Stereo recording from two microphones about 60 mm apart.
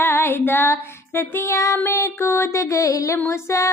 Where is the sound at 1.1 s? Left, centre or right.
Left.